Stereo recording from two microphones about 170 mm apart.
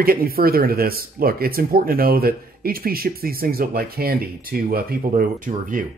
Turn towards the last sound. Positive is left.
turn(degrees=-50)  # may be behind; listen again after turning